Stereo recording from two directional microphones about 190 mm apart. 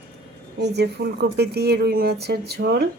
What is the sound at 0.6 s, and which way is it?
Speech, 60° right (ahead or behind).